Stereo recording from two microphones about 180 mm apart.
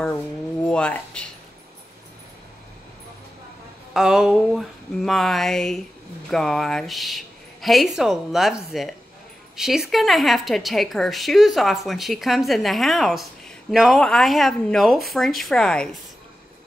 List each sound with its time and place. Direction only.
0.7 s speech: 5° left (ahead or behind)
3.9 s speech: 5° right (ahead or behind)